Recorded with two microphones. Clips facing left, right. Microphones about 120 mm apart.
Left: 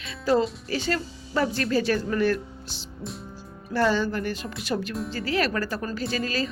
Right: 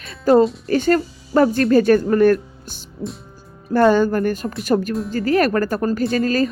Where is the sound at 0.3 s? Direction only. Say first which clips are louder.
Right 9 dB; 50° right (ahead or behind).